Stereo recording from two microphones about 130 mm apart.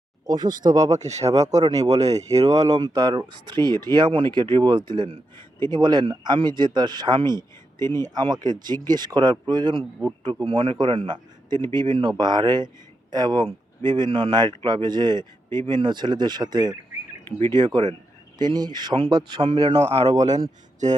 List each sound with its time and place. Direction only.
0.3 s speech: 30° right (ahead or behind)
0.9 s speech: 60° right (ahead or behind)
2.5 s speech: 30° right (ahead or behind)
19.7 s speech: 55° right (ahead or behind)
20.1 s speech: 65° right (ahead or behind)